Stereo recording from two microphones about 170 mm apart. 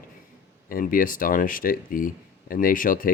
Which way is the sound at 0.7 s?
55° left (ahead or behind).